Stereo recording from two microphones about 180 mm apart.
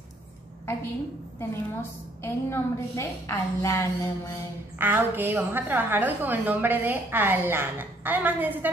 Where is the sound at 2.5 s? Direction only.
15° left (ahead or behind).